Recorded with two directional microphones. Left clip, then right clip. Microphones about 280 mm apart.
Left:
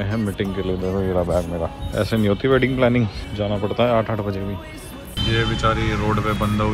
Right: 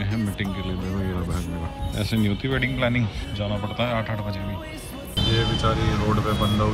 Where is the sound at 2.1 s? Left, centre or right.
Centre.